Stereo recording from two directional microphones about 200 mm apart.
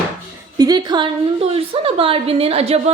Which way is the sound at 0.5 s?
20° right (ahead or behind).